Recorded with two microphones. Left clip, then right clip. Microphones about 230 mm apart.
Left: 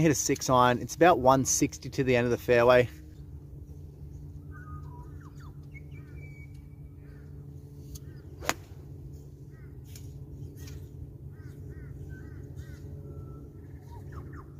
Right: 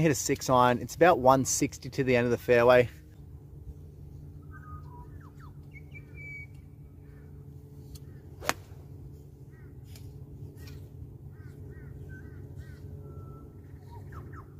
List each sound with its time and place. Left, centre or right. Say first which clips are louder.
0.0 s speech: left 1 dB; centre
8.4 s whip: even; right